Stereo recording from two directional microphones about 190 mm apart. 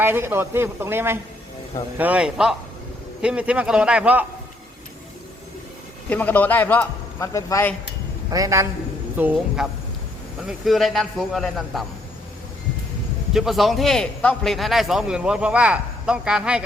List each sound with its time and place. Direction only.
0.0 s a man's voice: 10° right (ahead or behind)
6.1 s a man's voice: 10° left (ahead or behind)
8.3 s a man's voice: 15° right (ahead or behind); by 11.9 s centre (ahead or behind)
13.3 s a man's voice: centre (ahead or behind)